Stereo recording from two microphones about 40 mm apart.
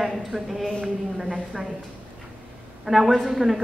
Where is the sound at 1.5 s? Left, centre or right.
Centre.